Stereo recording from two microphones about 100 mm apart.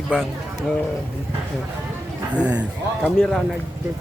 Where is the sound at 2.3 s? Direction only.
10° right (ahead or behind).